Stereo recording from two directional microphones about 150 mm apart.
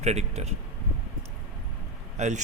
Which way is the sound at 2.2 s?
55° right (ahead or behind).